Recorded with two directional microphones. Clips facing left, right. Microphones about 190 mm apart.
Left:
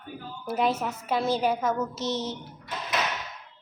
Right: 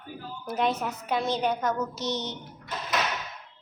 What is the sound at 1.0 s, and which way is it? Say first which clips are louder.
Speech: left 2 dB; 5° left (ahead or behind).